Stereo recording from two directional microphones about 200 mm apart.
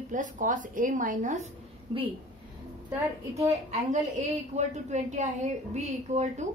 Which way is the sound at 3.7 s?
35° right (ahead or behind).